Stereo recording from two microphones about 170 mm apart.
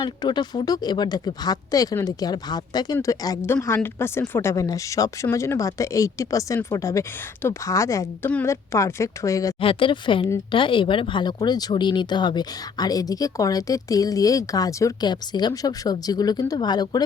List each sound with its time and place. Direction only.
0.0 s speech: 25° left (ahead or behind)
9.6 s speech: 30° left (ahead or behind)